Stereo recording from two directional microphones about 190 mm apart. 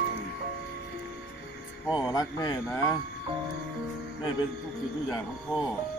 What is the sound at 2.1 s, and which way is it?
Speech, 20° left (ahead or behind).